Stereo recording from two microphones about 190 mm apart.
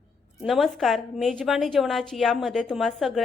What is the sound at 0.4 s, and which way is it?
A woman's voice, centre (ahead or behind).